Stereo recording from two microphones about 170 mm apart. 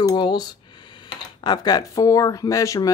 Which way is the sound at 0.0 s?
25° left (ahead or behind).